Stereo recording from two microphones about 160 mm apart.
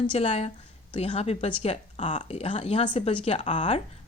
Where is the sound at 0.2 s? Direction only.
40° left (ahead or behind).